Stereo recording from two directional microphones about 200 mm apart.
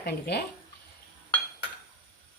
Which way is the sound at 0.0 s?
55° left (ahead or behind).